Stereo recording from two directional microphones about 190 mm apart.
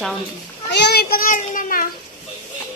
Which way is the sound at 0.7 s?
60° left (ahead or behind).